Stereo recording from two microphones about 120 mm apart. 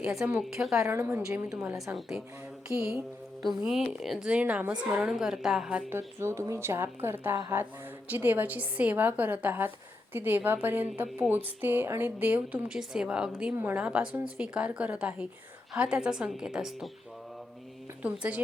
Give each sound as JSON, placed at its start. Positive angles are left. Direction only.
{"t": 0.1, "sound": "a woman's voice", "side_deg": -5}
{"t": 0.9, "sound": "a woman's voice", "side_deg": -20}
{"t": 1.5, "sound": "a woman's voice", "side_deg": -5}
{"t": 5.9, "sound": "a woman's voice", "side_deg": -20}
{"t": 18.0, "sound": "a woman's voice", "side_deg": -10}